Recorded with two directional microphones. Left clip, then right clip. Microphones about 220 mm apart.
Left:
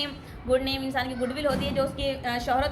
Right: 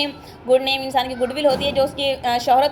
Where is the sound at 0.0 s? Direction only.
20° right (ahead or behind).